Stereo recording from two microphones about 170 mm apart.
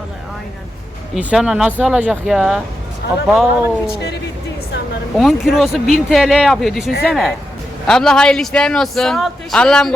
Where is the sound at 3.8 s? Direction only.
75° left (ahead or behind).